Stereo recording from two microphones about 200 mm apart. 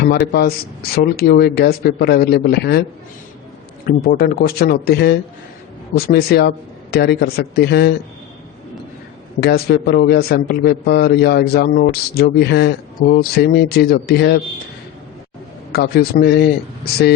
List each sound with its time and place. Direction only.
0.3 s a man's voice: 50° left (ahead or behind)
3.8 s a man's voice: 50° left (ahead or behind)
9.4 s a man's voice: 50° left (ahead or behind)
15.7 s a man's voice: 50° left (ahead or behind)